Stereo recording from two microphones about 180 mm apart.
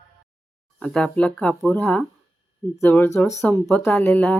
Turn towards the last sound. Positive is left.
turn(degrees=5)  # may be behind; listen again after turning